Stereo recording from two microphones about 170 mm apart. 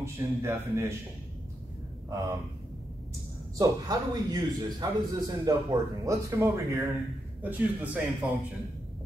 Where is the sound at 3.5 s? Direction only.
20° right (ahead or behind).